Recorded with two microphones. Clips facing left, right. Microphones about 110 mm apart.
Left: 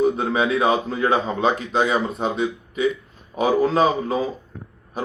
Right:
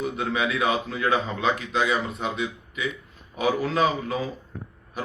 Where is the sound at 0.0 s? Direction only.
35° left (ahead or behind).